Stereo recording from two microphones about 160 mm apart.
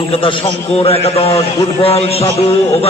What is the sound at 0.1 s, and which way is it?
A man's voice, 35° left (ahead or behind).